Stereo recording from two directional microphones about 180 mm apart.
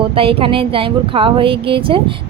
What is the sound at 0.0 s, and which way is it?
Speech, 30° right (ahead or behind).